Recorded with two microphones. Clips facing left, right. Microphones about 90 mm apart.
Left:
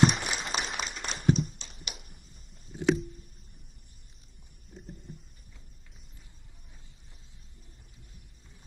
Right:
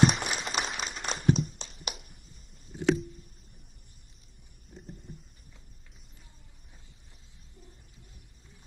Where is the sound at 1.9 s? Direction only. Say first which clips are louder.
Right 6 dB; 50° right (ahead or behind).